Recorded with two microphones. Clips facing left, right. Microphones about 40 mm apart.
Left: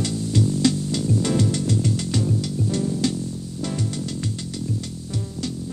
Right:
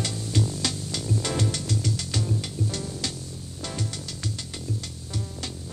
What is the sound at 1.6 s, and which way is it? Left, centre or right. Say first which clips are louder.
Music: left 6 dB; left.